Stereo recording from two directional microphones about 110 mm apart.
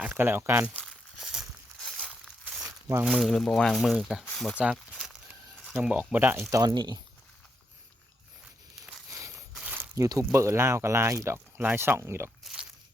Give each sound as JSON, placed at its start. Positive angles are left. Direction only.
{"t": 0.0, "sound": "speech", "side_deg": -20}
{"t": 1.2, "sound": "a sound", "side_deg": -5}
{"t": 2.5, "sound": "crumpling", "side_deg": -5}
{"t": 3.0, "sound": "speech", "side_deg": 0}
{"t": 4.5, "sound": "speech", "side_deg": -10}
{"t": 5.8, "sound": "speech", "side_deg": -10}
{"t": 6.5, "sound": "speech", "side_deg": -30}
{"t": 9.6, "sound": "a sound", "side_deg": -15}
{"t": 9.9, "sound": "speech", "side_deg": -30}
{"t": 12.4, "sound": "a sound", "side_deg": -5}